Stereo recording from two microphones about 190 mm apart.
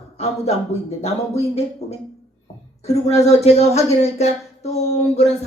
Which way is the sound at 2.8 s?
35° left (ahead or behind).